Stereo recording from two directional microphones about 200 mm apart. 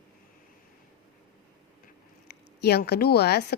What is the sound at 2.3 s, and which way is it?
A woman's voice, 55° left (ahead or behind).